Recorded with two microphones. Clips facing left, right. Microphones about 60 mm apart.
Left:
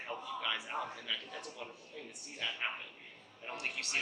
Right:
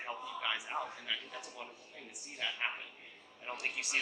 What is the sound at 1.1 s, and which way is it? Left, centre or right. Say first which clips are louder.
Speech: right 2 dB; centre.